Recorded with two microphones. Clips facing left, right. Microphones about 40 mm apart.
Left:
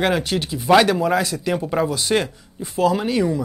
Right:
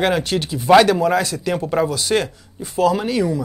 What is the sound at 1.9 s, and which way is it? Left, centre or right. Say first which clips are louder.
Speech: right 1 dB; centre.